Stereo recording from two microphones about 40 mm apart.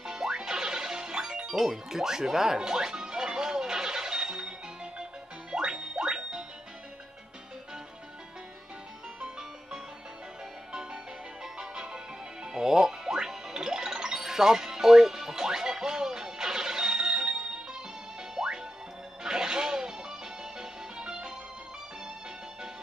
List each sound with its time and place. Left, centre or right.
0.0 s music: centre
10.7 s music: right